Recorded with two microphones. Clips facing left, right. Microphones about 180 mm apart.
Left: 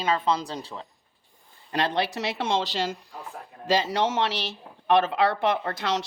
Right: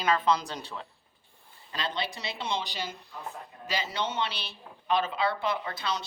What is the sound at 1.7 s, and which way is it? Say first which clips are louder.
Speech: left 8 dB; 70° left (ahead or behind).